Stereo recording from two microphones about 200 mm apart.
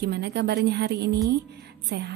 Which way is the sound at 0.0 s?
55° right (ahead or behind).